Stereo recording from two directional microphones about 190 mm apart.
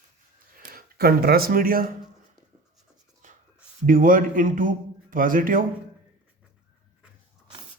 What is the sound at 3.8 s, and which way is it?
A man's voice, 45° right (ahead or behind).